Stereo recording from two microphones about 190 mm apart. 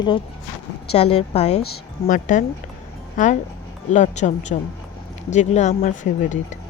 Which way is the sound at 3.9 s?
40° left (ahead or behind).